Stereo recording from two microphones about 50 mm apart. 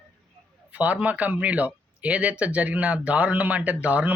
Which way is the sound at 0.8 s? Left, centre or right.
Right.